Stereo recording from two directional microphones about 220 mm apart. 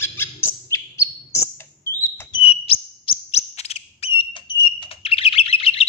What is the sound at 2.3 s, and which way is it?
Bird, 25° left (ahead or behind).